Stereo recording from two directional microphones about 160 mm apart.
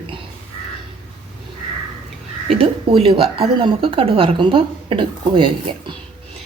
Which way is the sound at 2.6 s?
35° right (ahead or behind).